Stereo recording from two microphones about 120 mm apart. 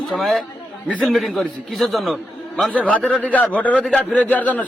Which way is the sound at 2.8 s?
10° left (ahead or behind).